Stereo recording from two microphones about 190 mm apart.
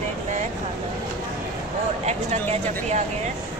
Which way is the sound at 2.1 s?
35° right (ahead or behind).